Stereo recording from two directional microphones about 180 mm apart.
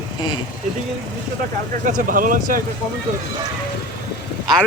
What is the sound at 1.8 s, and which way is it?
Speech, 50° right (ahead or behind).